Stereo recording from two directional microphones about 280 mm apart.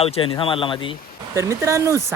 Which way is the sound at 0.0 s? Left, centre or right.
Centre.